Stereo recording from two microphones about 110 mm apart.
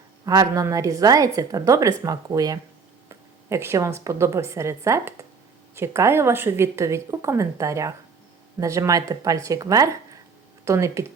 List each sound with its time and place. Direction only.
0.3 s a woman's voice: 30° right (ahead or behind)